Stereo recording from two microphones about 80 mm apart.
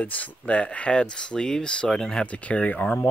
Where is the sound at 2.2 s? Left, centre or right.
Centre.